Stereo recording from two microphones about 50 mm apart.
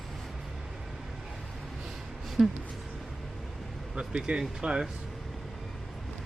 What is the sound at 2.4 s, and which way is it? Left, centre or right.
Speech, centre.